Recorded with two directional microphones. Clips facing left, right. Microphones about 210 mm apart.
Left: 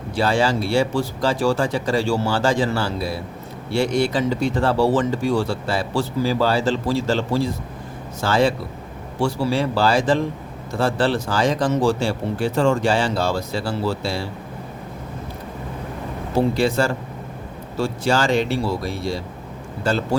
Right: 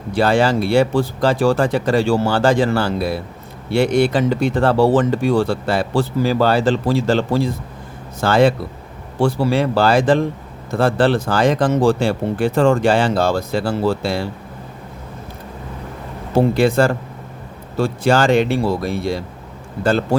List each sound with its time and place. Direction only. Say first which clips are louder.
0.2 s speech: right 4 dB; 60° right (ahead or behind)
16.6 s speech: right 5 dB; 55° right (ahead or behind)